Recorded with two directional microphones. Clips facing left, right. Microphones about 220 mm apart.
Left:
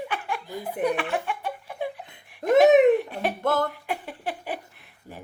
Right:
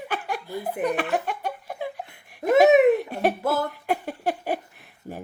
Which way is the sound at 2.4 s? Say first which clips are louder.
Even; 5° right (ahead or behind).